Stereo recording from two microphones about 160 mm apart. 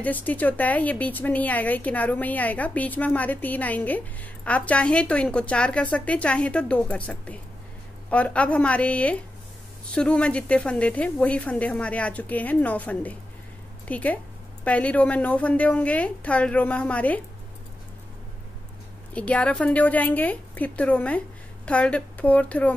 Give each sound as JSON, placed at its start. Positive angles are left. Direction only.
{"t": 0.0, "sound": "speech", "side_deg": 10}
{"t": 19.1, "sound": "speech", "side_deg": 10}